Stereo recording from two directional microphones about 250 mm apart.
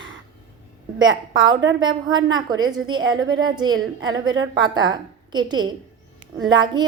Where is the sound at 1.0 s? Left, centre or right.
Right.